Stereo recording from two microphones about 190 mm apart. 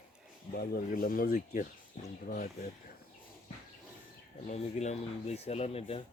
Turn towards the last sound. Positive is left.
turn(degrees=30)  # may be behind; listen again after turning